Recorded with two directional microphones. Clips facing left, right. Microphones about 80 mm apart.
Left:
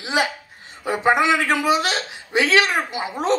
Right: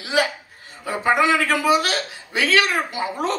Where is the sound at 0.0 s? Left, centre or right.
Left.